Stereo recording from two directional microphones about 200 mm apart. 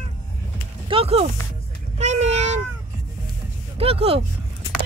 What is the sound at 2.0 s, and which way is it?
Vehicle, 35° right (ahead or behind).